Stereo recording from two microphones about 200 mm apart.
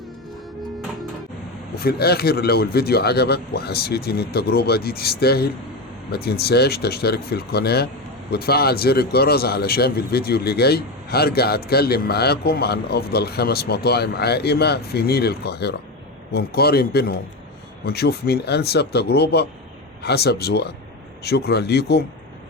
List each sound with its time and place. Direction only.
1.8 s speech: 50° left (ahead or behind)